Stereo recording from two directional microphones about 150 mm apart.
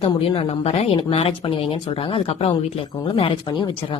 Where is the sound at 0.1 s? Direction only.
35° left (ahead or behind).